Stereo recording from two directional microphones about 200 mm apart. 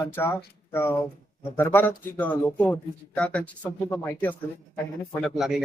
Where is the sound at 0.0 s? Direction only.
10° left (ahead or behind).